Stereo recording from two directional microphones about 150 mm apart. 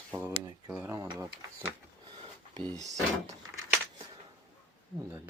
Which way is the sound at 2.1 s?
40° right (ahead or behind).